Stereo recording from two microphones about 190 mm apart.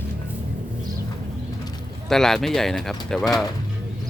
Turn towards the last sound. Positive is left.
turn(degrees=0)  # may be behind; listen again after turning